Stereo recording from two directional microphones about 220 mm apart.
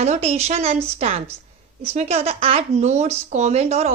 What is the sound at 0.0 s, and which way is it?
A woman's voice, 30° right (ahead or behind).